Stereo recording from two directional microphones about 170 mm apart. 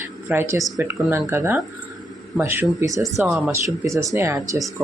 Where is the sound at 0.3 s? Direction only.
15° right (ahead or behind).